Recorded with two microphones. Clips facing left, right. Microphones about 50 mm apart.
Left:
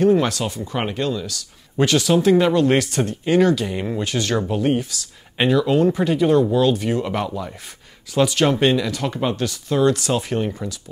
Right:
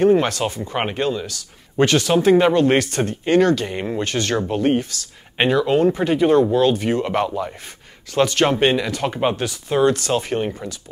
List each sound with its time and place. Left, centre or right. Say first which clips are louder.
0.0 s speech: right 1 dB; centre
1.8 s speech: right 1 dB; centre
3.1 s speech: right 1 dB; centre
3.6 s speech: even; centre
4.0 s speech: right 1 dB; centre
5.4 s speech: right 1 dB; right
10.1 s speech: right 1 dB; centre